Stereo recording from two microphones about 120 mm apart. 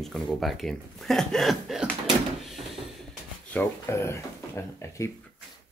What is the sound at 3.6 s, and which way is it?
Speech, 20° left (ahead or behind).